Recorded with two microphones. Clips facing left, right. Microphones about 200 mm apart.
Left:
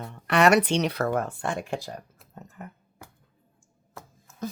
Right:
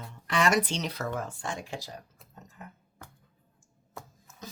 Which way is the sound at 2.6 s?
55° left (ahead or behind).